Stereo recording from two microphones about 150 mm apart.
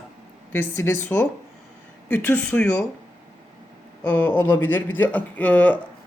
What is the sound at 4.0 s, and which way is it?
Speech, 10° left (ahead or behind).